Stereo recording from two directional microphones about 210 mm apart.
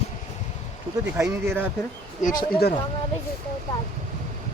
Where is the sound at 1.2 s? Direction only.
10° right (ahead or behind).